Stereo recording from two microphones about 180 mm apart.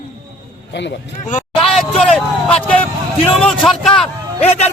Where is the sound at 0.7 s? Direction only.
75° left (ahead or behind).